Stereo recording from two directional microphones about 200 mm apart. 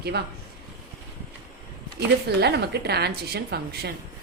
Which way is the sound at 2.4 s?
55° right (ahead or behind).